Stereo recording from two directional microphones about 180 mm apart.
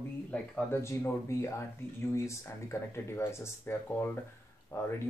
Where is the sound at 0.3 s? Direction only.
15° left (ahead or behind).